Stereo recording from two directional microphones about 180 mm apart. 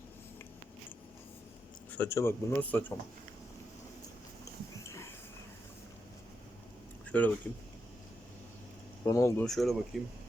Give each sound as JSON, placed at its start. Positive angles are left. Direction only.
{"t": 1.9, "sound": "speech", "side_deg": 10}
{"t": 4.8, "sound": "a sound", "side_deg": 15}
{"t": 7.1, "sound": "speech", "side_deg": 10}
{"t": 9.0, "sound": "speech", "side_deg": 15}
{"t": 9.4, "sound": "speech", "side_deg": 0}